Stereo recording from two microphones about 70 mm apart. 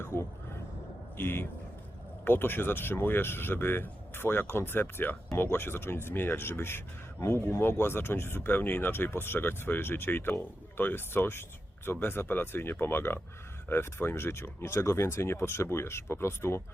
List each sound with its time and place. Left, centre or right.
0.0 s speech: left